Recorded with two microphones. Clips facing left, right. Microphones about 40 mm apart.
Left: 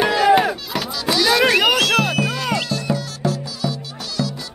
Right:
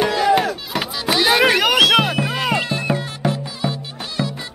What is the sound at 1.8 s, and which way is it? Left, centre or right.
Music, centre.